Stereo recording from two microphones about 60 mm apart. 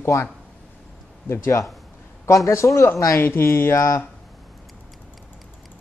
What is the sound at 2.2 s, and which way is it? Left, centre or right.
Speech, left.